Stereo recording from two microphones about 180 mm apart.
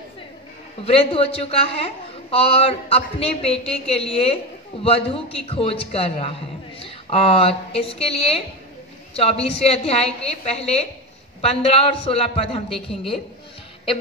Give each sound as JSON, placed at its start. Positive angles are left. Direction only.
{"t": 0.8, "sound": "a man's voice", "side_deg": 30}